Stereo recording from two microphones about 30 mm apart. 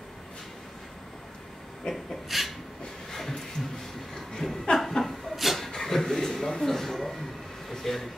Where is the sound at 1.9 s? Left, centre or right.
Left.